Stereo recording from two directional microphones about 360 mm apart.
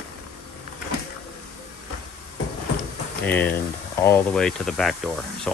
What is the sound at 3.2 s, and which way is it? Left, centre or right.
Speech, centre.